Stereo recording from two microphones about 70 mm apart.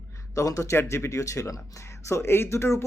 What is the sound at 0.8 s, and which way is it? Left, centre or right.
Speech, left.